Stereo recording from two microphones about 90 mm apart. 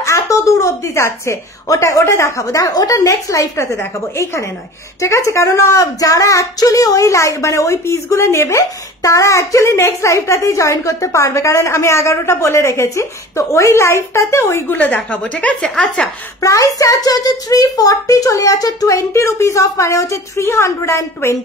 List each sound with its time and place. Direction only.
0.0 s speech: 35° left (ahead or behind); by 16.1 s 10° left (ahead or behind)
16.3 s speech: 35° left (ahead or behind)